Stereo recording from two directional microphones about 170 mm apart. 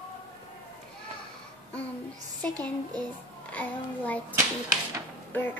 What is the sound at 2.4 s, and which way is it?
A woman's voice, 10° left (ahead or behind).